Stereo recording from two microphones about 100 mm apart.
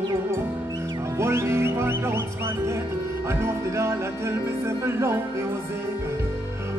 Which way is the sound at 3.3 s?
25° right (ahead or behind).